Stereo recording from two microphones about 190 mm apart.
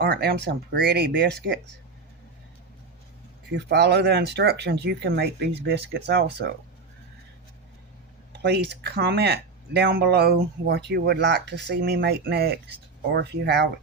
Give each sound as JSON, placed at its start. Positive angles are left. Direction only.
{"t": 0.0, "sound": "speech", "side_deg": -55}
{"t": 3.5, "sound": "speech", "side_deg": -60}
{"t": 8.4, "sound": "speech", "side_deg": -60}